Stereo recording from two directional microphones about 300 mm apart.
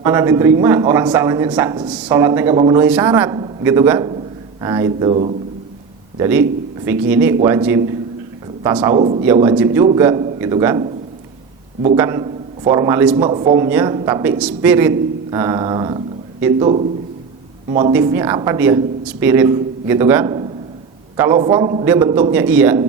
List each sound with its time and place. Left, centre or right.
0.0 s a man's voice: centre
9.0 s a man's voice: centre
11.9 s a man's voice: centre